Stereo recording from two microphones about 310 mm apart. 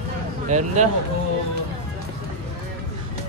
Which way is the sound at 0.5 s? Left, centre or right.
Right.